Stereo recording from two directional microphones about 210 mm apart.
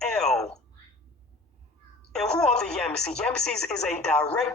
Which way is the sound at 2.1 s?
5° left (ahead or behind).